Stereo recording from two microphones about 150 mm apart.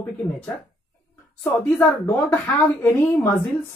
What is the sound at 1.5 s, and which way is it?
Speech, 15° left (ahead or behind).